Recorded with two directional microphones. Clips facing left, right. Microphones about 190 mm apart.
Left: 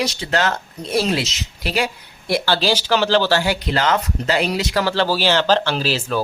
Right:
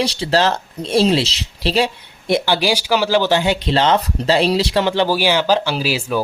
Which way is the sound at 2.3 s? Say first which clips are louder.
Right 2 dB; 15° right (ahead or behind).